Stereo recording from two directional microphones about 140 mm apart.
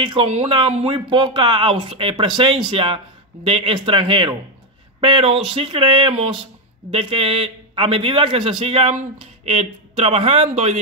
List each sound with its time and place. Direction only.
0.0 s speech: 35° right (ahead or behind)